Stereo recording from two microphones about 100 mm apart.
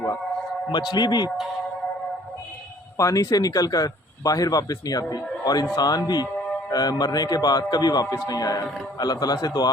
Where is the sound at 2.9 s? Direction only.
35° left (ahead or behind).